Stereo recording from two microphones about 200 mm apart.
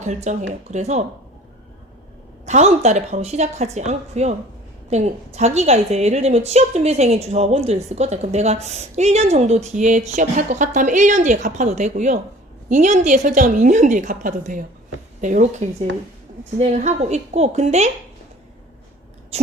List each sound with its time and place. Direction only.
0.0 s a woman's voice: 35° right (ahead or behind)
2.5 s a woman's voice: 35° right (ahead or behind)
19.3 s a woman's voice: 30° right (ahead or behind)